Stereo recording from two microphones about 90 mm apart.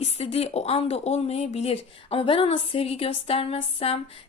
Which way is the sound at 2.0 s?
90° left.